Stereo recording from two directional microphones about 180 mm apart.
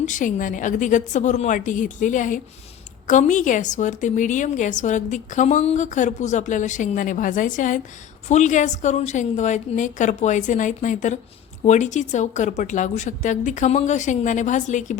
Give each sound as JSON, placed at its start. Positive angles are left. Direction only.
{"t": 0.0, "sound": "a woman's voice", "side_deg": 45}